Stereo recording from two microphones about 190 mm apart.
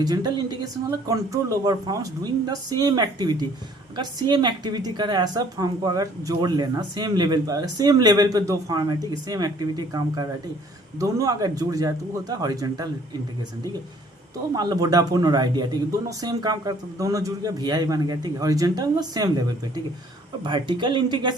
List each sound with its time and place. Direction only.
0.0 s a woman's voice: 20° right (ahead or behind)
14.5 s a woman's voice: 20° right (ahead or behind)